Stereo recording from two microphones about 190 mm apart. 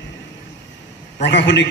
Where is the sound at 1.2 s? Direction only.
65° left (ahead or behind).